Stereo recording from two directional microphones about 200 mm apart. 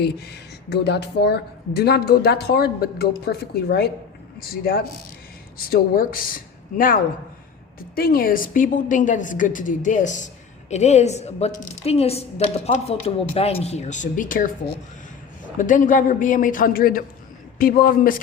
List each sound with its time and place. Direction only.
0.0 s a man's voice: 55° left (ahead or behind)